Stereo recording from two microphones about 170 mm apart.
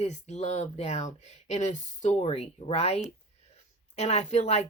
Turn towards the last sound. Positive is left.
turn(degrees=40)  # may be behind; listen again after turning